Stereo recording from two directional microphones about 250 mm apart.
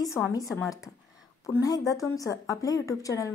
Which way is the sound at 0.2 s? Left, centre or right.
Centre.